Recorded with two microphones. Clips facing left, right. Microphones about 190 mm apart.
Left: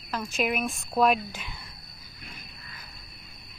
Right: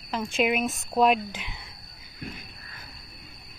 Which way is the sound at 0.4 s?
20° right (ahead or behind).